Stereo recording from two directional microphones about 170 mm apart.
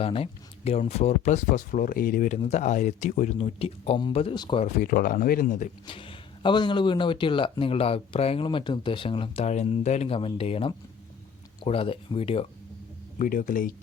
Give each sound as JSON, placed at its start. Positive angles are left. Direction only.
{"t": 0.0, "sound": "speech", "side_deg": 35}
{"t": 4.6, "sound": "speech", "side_deg": 55}
{"t": 5.9, "sound": "speech", "side_deg": 30}
{"t": 13.1, "sound": "speech", "side_deg": 55}